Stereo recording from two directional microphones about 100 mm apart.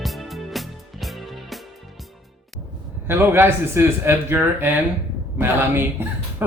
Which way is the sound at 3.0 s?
25° right (ahead or behind).